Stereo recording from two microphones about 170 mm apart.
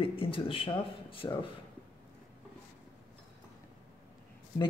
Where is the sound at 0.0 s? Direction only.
30° left (ahead or behind).